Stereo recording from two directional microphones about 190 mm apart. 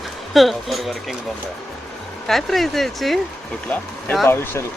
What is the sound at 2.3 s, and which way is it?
Speech, centre (ahead or behind).